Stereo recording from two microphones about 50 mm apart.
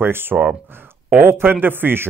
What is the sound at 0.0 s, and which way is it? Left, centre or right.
Speech, right.